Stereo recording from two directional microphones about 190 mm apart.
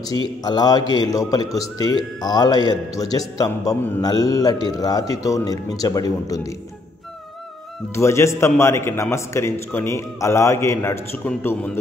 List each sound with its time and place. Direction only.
0.4 s a man's voice: 20° left (ahead or behind)
7.9 s a man's voice: 15° left (ahead or behind)